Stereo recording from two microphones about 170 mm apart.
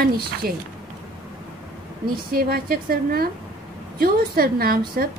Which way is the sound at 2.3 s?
60° right (ahead or behind).